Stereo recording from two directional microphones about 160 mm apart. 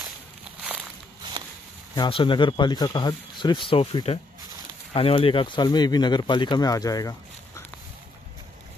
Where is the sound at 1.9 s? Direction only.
30° left (ahead or behind).